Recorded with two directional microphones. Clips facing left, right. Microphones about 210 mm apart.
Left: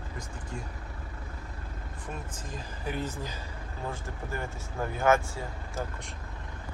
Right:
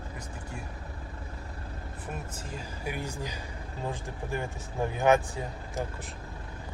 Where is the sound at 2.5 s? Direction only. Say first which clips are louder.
Left 1 dB; 10° right (ahead or behind).